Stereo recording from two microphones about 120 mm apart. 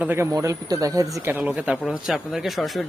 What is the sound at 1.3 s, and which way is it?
Speech, 10° right (ahead or behind).